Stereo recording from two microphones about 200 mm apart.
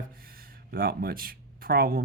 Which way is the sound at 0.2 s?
50° right (ahead or behind).